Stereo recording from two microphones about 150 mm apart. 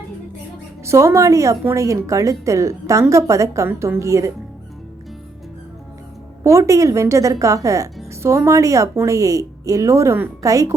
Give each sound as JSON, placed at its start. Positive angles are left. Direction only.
{"t": 0.9, "sound": "a woman's voice", "side_deg": -20}
{"t": 6.4, "sound": "a woman's voice", "side_deg": -20}